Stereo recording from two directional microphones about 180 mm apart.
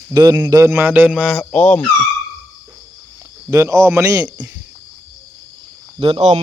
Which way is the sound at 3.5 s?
15° right (ahead or behind).